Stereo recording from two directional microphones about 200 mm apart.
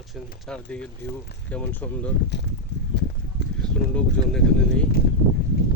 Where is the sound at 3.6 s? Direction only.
5° left (ahead or behind).